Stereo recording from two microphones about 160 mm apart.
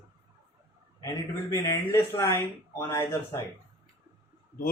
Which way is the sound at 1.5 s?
20° left (ahead or behind).